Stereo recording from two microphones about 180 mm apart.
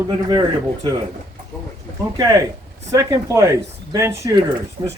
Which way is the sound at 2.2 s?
20° right (ahead or behind).